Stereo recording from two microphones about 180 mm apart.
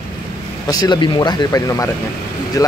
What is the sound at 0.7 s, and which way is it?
Speech, 20° left (ahead or behind).